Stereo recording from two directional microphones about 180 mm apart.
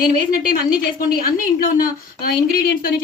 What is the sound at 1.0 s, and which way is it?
Speech, 55° left (ahead or behind).